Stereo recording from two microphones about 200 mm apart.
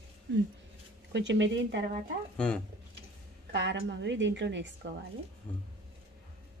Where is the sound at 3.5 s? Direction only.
60° right (ahead or behind).